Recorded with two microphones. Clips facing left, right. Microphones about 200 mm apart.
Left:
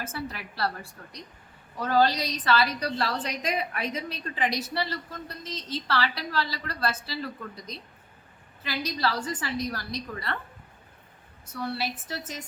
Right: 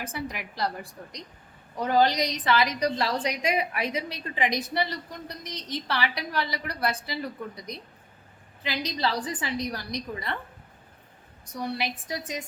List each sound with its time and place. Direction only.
0.0 s a woman's voice: 15° right (ahead or behind)
11.4 s a woman's voice: 15° right (ahead or behind)